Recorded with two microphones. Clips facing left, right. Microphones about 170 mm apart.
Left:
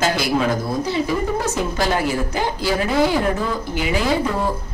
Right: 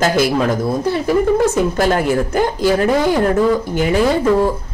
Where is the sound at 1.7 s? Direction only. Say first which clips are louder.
Right 5 dB; 50° right (ahead or behind).